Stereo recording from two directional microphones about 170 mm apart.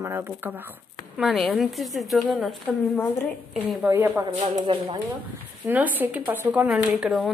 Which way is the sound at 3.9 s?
20° right (ahead or behind).